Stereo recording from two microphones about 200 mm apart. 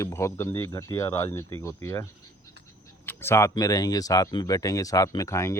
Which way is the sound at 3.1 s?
10° left (ahead or behind).